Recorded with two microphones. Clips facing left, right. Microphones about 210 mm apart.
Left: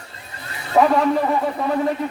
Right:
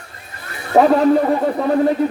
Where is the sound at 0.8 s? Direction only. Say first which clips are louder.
Right 4 dB; 35° right (ahead or behind).